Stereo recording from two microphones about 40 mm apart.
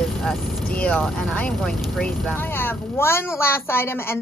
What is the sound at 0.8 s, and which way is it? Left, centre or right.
Speech, left.